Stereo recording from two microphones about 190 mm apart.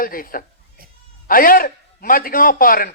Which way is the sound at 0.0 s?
50° left (ahead or behind).